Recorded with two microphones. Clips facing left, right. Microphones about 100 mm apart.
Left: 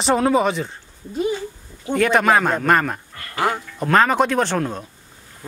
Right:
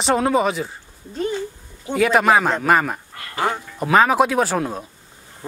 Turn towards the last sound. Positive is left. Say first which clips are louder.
# even
turn(degrees=-5)  # may be behind; listen again after turning